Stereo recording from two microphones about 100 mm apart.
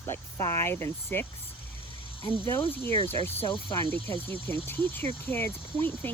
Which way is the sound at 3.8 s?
60° right (ahead or behind).